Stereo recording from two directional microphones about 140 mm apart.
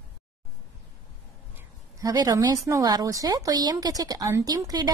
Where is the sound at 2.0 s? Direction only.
25° right (ahead or behind).